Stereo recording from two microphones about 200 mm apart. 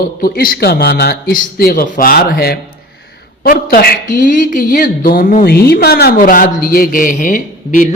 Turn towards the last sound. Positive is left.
turn(degrees=40)  # may be behind; listen again after turning